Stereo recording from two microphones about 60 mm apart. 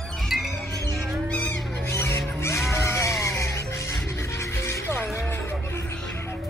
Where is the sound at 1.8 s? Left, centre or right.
Left.